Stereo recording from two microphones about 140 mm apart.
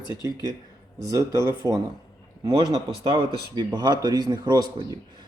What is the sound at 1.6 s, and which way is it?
Speech, 25° right (ahead or behind).